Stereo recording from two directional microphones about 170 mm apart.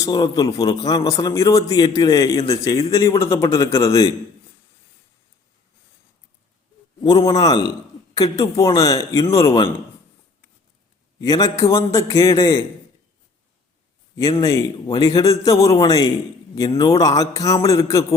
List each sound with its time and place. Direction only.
0.0 s a man's voice: 25° left (ahead or behind)
7.3 s a man's voice: 25° left (ahead or behind)
11.2 s a man's voice: 20° left (ahead or behind)
14.2 s a man's voice: 20° left (ahead or behind)